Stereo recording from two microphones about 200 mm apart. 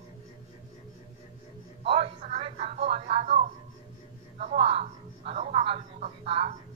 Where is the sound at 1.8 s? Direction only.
30° right (ahead or behind).